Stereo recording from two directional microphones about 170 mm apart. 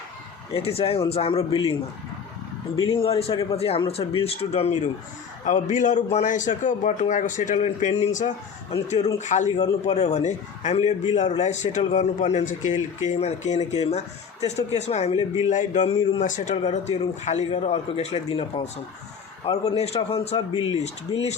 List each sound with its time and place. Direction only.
0.5 s speech: 35° left (ahead or behind)
2.8 s a man's voice: 35° left (ahead or behind)
19.7 s speech: 35° left (ahead or behind)